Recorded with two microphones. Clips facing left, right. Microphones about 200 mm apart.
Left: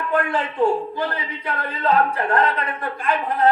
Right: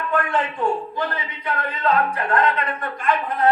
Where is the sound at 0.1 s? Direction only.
35° left (ahead or behind).